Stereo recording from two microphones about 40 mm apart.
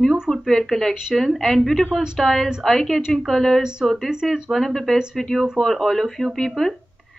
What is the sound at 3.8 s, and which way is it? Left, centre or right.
A woman's voice, centre.